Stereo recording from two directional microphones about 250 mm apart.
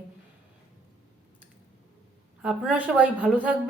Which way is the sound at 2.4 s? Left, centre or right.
Centre.